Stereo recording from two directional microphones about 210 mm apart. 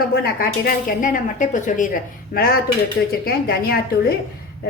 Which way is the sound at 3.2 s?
45° left (ahead or behind).